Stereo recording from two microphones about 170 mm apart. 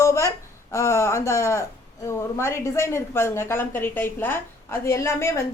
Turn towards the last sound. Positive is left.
turn(degrees=15)  # may be behind; listen again after turning